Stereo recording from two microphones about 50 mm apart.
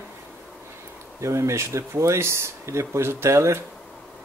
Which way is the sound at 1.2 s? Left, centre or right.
Right.